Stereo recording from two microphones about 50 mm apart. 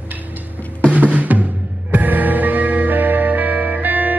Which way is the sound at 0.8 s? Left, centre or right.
Right.